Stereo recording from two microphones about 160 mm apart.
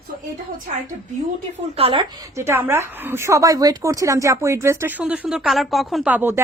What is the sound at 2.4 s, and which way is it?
Speech, 15° right (ahead or behind).